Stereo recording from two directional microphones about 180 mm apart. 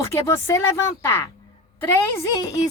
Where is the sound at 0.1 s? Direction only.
15° left (ahead or behind).